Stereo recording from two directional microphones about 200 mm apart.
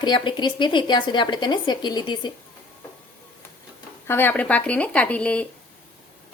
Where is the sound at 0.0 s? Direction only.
20° left (ahead or behind).